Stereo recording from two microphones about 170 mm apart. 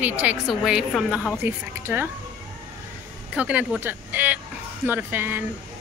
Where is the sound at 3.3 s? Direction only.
5° right (ahead or behind).